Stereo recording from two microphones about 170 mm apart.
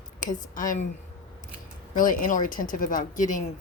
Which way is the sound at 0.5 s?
50° left (ahead or behind).